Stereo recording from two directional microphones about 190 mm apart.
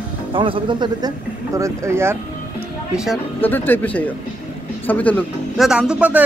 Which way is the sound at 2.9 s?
Centre (ahead or behind).